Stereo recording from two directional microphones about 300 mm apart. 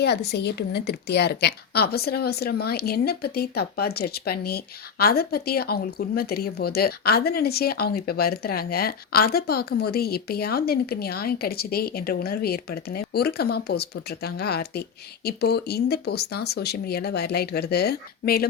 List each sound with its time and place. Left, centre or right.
0.0 s a woman's voice: left